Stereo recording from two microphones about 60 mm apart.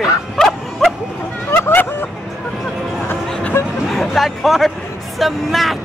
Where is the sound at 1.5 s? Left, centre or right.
Left.